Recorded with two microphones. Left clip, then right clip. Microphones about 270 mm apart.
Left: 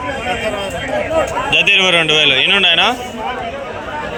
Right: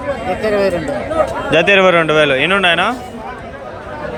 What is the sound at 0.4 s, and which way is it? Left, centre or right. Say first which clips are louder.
Speech: right 6 dB; right.